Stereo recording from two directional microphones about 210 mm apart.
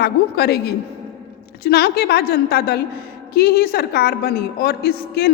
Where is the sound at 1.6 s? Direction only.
50° left (ahead or behind).